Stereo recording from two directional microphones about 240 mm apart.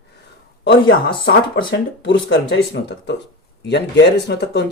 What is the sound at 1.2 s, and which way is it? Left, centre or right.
Speech, left.